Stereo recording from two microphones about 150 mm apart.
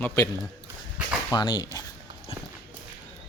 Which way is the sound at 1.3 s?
25° left (ahead or behind).